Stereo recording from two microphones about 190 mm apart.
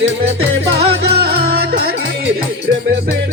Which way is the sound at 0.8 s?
60° right (ahead or behind).